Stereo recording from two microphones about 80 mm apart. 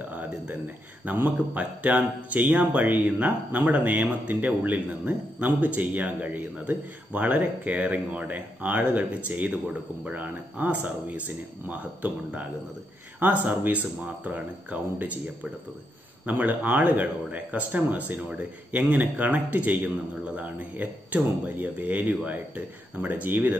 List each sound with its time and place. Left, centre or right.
0.0 s speech: right
16.3 s speech: right